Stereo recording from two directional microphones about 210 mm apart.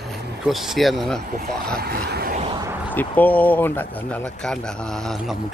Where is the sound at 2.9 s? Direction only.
10° left (ahead or behind).